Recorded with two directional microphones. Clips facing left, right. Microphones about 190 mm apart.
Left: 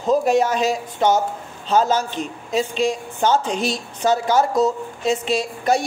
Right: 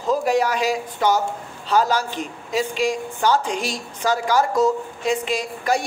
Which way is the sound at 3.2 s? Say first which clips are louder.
Left 2 dB; 20° left (ahead or behind).